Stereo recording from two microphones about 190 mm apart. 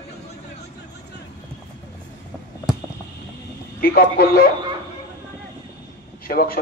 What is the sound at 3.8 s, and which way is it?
Speech, 50° left (ahead or behind).